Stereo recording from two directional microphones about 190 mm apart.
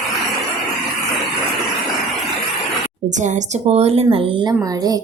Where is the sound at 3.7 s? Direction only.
35° right (ahead or behind).